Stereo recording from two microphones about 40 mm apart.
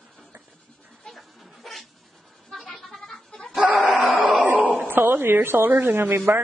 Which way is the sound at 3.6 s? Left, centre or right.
Right.